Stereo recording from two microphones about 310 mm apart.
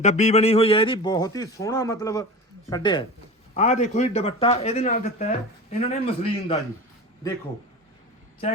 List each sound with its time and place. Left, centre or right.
0.0 s a man's voice: left